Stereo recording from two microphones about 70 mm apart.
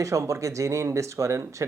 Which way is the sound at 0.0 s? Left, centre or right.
Right.